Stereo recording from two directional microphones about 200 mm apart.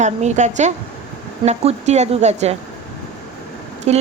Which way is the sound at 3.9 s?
35° right (ahead or behind).